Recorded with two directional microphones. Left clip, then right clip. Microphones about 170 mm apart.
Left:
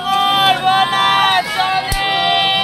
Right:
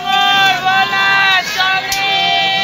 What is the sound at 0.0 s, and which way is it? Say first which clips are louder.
Vehicle: right 2 dB; 60° left (ahead or behind).